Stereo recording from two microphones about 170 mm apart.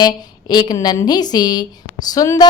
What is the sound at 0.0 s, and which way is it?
Speech, 25° left (ahead or behind).